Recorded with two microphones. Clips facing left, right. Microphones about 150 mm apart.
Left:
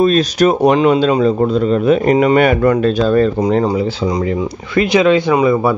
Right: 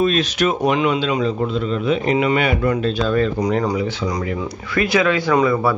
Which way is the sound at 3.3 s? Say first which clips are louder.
Left 5 dB; 25° left (ahead or behind).